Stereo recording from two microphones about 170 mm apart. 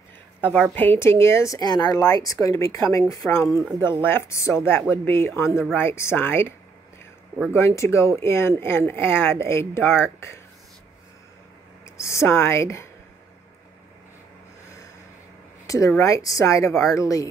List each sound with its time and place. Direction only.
0.4 s speech: 10° left (ahead or behind)
7.5 s speech: 15° left (ahead or behind)
11.8 s a woman's voice: 15° left (ahead or behind)
15.6 s a sound: 20° left (ahead or behind)
16.0 s speech: 20° left (ahead or behind)